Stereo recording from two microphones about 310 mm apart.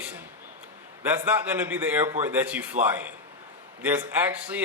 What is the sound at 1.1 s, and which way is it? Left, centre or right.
A man's voice, centre.